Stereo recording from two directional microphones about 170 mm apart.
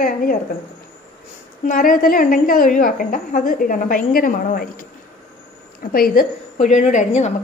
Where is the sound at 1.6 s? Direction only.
55° left (ahead or behind).